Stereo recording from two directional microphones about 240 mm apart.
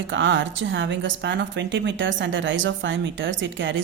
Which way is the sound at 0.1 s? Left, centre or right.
Right.